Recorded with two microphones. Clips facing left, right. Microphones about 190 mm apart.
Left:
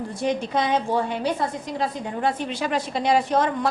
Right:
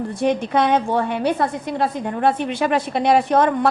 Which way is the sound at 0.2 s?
60° right (ahead or behind).